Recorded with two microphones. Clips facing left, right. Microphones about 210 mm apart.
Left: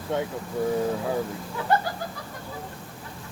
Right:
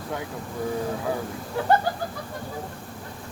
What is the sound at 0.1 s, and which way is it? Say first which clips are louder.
Speech: left 6 dB; 25° left (ahead or behind).